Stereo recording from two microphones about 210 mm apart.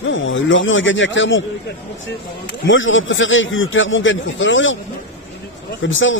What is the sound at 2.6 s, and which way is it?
A man's voice, 65° left (ahead or behind).